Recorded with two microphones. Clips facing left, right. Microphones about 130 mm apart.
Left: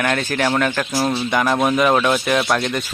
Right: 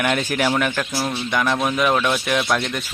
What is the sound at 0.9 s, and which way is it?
Speech, 25° left (ahead or behind).